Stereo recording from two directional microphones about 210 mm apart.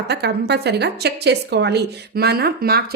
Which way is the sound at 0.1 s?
50° right (ahead or behind).